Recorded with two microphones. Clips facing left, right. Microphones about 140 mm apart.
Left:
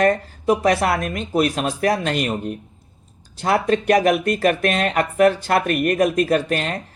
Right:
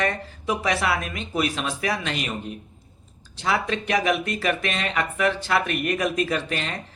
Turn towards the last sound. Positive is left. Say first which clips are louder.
# left 7 dB
turn(degrees=45)  # may be behind; listen again after turning